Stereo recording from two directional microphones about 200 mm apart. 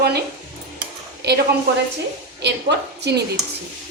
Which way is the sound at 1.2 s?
55° right (ahead or behind).